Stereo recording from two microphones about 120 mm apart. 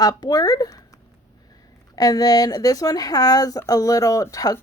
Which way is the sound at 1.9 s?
30° left (ahead or behind).